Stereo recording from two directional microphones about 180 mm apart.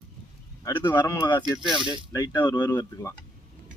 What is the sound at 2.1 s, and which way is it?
Speech, 20° left (ahead or behind).